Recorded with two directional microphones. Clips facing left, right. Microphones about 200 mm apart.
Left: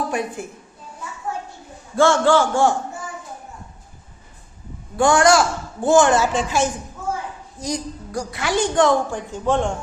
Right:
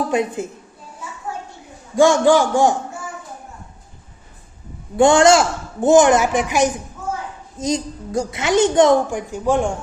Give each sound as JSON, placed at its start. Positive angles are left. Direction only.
{"t": 0.1, "sound": "a woman's voice", "side_deg": -20}
{"t": 2.0, "sound": "a man's voice", "side_deg": -15}
{"t": 4.9, "sound": "a woman's voice", "side_deg": -25}